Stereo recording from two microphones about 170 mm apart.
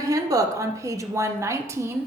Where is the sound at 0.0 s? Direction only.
20° right (ahead or behind).